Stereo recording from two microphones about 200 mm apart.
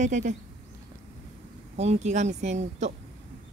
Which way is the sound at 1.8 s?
35° right (ahead or behind).